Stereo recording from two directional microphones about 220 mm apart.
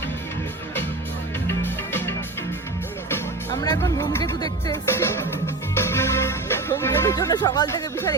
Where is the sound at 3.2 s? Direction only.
15° left (ahead or behind).